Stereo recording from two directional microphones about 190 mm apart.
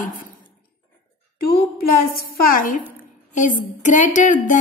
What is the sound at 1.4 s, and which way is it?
Speech, 55° left (ahead or behind).